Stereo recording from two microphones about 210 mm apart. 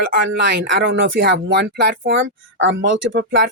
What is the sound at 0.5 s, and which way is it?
Speech, 55° right (ahead or behind).